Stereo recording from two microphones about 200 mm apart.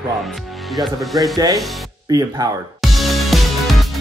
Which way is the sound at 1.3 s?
20° right (ahead or behind).